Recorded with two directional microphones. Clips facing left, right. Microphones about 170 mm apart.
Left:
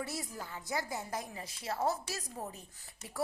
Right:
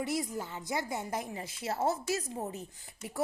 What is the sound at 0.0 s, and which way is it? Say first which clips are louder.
Speech: right 7 dB; 20° right (ahead or behind).